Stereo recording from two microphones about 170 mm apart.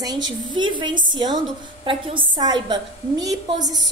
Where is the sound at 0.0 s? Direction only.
25° right (ahead or behind).